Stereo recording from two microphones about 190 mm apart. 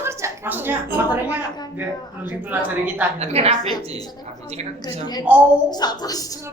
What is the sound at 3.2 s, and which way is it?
Speech, 35° right (ahead or behind).